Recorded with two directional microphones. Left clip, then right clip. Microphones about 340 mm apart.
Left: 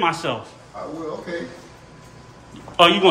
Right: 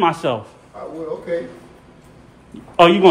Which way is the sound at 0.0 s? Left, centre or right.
Centre.